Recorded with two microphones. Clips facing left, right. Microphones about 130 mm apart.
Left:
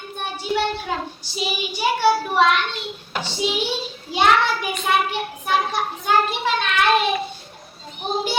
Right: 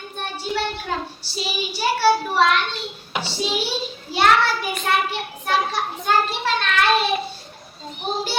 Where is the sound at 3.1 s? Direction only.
10° right (ahead or behind).